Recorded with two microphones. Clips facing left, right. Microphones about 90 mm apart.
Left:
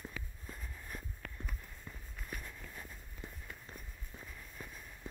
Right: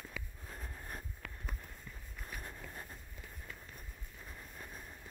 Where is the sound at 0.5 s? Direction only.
45° right (ahead or behind).